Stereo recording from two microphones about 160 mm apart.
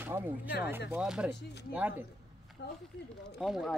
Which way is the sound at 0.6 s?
10° right (ahead or behind).